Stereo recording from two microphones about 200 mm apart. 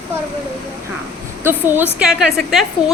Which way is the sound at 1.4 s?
10° right (ahead or behind).